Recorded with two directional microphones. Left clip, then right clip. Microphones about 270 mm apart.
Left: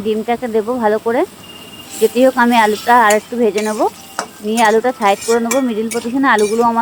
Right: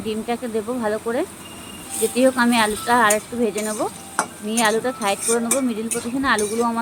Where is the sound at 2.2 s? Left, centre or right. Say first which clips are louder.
Left 6 dB; left.